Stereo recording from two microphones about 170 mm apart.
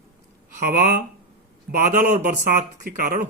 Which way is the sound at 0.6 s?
60° right (ahead or behind).